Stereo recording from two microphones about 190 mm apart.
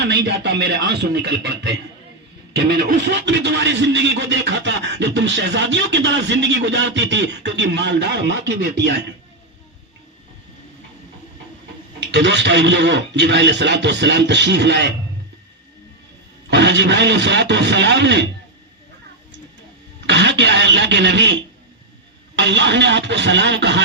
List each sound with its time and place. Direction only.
0.0 s a man's voice: 65° right (ahead or behind)
12.1 s a man's voice: 65° right (ahead or behind)
16.5 s a man's voice: 65° right (ahead or behind)
20.1 s speech: 65° right (ahead or behind)
22.4 s a man's voice: 70° right (ahead or behind)